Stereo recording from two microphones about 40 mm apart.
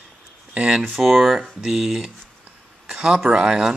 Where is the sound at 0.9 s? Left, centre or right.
Centre.